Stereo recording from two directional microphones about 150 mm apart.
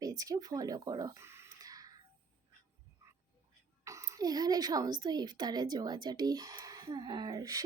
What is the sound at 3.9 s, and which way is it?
A woman's voice, 20° right (ahead or behind).